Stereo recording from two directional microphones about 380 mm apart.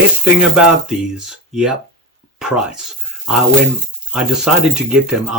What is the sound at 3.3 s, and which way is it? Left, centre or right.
Speech, centre.